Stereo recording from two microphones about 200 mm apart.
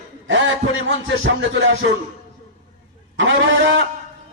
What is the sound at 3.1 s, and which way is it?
Speech, 65° right (ahead or behind).